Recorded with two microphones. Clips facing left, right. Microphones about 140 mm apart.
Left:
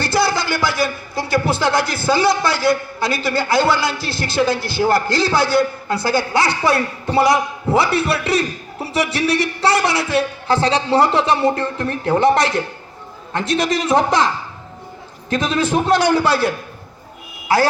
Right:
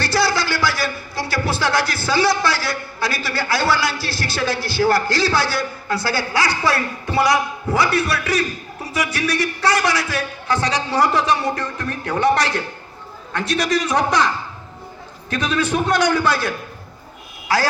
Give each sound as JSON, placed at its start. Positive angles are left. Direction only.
{"t": 0.0, "sound": "music", "side_deg": 20}
{"t": 9.4, "sound": "a man's voice", "side_deg": 30}
{"t": 15.3, "sound": "a man's voice", "side_deg": 25}